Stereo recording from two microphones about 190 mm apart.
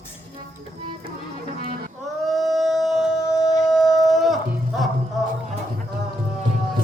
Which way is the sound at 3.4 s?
15° left (ahead or behind).